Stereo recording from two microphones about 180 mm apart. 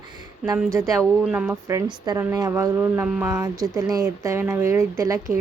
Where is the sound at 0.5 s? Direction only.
15° right (ahead or behind).